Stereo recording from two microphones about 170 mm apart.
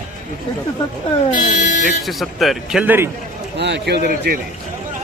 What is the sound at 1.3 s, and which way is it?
Speech, 45° left (ahead or behind).